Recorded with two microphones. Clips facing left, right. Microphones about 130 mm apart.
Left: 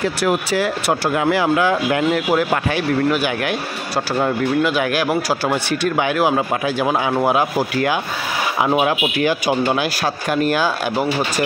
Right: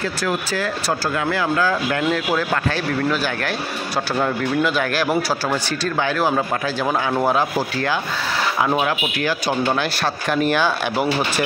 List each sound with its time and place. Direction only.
1.0 s speech: 25° left (ahead or behind); by 10.7 s 5° left (ahead or behind)